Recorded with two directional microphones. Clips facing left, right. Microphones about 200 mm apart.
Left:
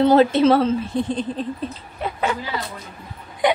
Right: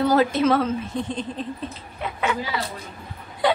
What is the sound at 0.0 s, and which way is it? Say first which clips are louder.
A woman's voice: left 5 dB; 25° left (ahead or behind).